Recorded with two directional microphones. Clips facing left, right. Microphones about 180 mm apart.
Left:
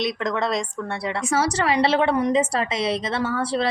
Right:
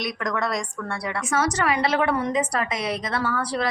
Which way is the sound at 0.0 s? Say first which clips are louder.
Left 3 dB; 25° left (ahead or behind).